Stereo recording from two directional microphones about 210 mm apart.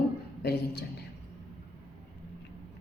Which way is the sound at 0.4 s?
50° left (ahead or behind).